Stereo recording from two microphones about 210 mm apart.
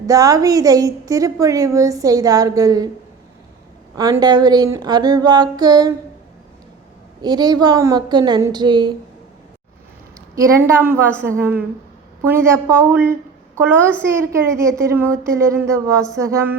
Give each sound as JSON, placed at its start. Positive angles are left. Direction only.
{"t": 0.1, "sound": "a woman's voice", "side_deg": -15}
{"t": 3.9, "sound": "speech", "side_deg": -20}
{"t": 7.2, "sound": "speech", "side_deg": -20}
{"t": 10.3, "sound": "a woman's voice", "side_deg": -15}